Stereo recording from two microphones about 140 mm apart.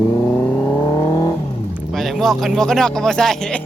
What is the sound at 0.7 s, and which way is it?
Vehicle, 35° left (ahead or behind).